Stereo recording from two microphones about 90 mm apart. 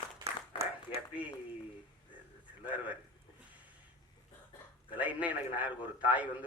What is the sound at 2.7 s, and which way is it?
Speech, 15° right (ahead or behind).